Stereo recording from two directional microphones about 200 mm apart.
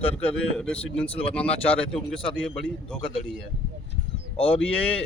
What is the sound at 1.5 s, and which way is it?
Speech, 30° left (ahead or behind).